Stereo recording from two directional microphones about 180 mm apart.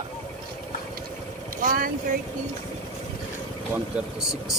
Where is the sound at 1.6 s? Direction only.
50° right (ahead or behind).